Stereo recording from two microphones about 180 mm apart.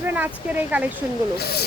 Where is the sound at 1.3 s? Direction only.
60° left (ahead or behind).